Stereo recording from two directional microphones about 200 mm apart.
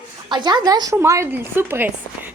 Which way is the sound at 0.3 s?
20° right (ahead or behind).